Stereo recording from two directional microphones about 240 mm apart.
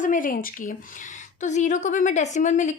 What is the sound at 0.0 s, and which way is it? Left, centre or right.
A woman's voice, left.